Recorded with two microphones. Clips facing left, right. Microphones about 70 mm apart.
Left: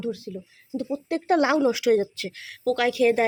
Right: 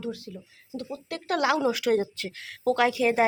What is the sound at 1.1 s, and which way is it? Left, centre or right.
A woman's voice, left.